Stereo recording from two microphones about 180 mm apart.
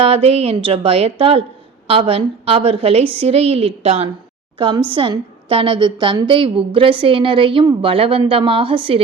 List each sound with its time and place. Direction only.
0.0 s a woman's voice: 35° right (ahead or behind)